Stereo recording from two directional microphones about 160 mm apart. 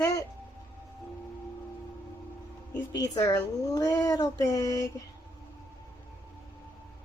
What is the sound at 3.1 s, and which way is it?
Speech, 20° left (ahead or behind).